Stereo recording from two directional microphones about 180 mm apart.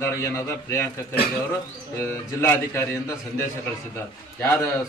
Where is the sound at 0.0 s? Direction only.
15° left (ahead or behind).